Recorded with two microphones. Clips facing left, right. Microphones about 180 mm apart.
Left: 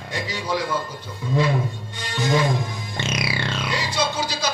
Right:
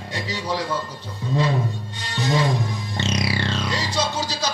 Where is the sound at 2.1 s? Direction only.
35° right (ahead or behind).